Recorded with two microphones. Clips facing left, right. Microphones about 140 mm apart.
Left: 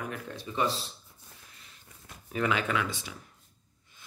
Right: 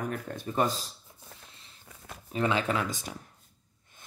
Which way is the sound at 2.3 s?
30° right (ahead or behind).